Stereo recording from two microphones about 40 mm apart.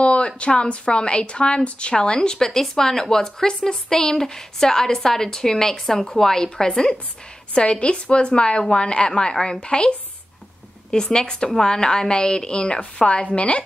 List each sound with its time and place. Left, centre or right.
0.0 s a sound: left
0.4 s a woman's voice: left
7.5 s a woman's voice: left